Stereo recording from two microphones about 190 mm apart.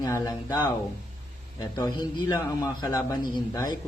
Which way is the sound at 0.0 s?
20° left (ahead or behind).